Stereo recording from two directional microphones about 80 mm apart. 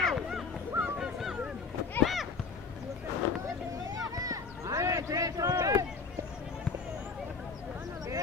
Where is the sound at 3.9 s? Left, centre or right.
Right.